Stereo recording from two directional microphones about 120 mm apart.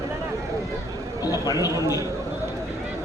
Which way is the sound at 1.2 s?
30° left (ahead or behind).